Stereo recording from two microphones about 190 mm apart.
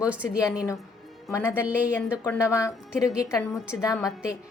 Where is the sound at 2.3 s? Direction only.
15° left (ahead or behind).